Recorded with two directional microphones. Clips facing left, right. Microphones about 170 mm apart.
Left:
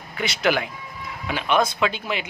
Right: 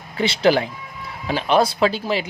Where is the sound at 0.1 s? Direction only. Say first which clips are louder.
Right 5 dB; 30° right (ahead or behind).